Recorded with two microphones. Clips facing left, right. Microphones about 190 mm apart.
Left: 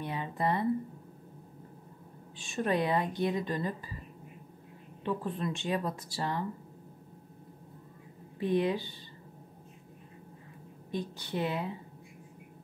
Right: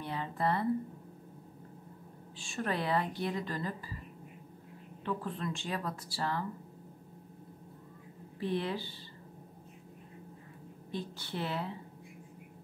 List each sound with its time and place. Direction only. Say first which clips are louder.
0.0 s a sound: left 1 dB; 15° left (ahead or behind)
2.3 s a woman's voice: left 5 dB; 20° left (ahead or behind)
5.0 s a woman's voice: left 3 dB; 20° left (ahead or behind)
8.4 s a woman's voice: left 5 dB; 15° left (ahead or behind)
10.9 s a woman's voice: left 4 dB; 15° left (ahead or behind)